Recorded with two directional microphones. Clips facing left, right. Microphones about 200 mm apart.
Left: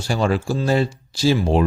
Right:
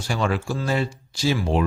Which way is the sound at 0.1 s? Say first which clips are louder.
Left 4 dB; 35° left (ahead or behind).